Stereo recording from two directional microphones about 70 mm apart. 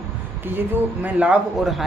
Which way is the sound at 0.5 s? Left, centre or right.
Right.